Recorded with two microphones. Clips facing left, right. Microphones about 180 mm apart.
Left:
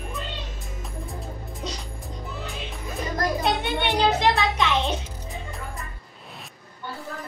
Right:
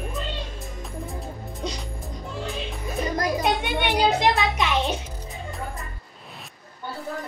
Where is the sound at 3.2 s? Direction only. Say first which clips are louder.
Even; 15° right (ahead or behind).